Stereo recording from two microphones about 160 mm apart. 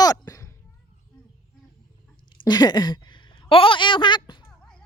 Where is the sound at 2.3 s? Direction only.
25° left (ahead or behind).